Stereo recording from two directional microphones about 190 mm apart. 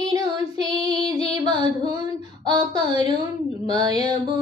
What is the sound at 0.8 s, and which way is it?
Female singing, 30° left (ahead or behind).